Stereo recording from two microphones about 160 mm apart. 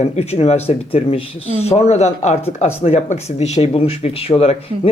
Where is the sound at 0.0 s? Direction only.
40° left (ahead or behind).